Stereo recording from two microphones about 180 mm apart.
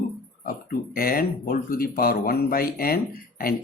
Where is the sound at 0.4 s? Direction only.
55° left (ahead or behind).